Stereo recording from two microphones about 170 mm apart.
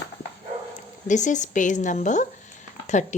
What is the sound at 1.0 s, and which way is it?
Speech, 45° left (ahead or behind).